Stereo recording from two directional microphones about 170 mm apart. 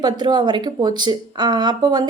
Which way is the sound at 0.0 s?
25° right (ahead or behind).